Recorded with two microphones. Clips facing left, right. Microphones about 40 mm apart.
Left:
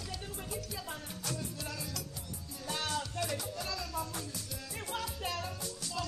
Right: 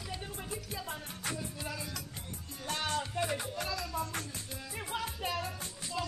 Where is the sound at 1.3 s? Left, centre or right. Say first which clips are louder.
Right 1 dB; centre.